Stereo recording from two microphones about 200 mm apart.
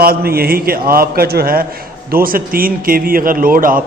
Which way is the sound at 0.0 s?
50° right (ahead or behind).